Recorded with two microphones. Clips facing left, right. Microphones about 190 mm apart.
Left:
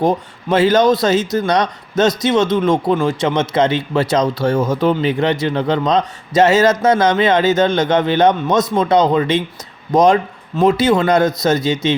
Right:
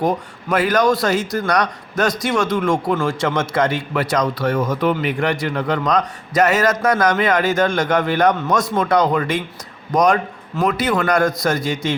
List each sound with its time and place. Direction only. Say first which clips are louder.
0.0 s speech: left 3 dB; 25° left (ahead or behind)